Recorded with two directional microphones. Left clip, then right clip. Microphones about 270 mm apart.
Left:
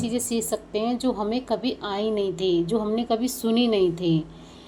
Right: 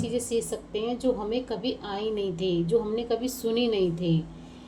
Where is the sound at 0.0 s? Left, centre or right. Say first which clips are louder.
Left 1 dB; left.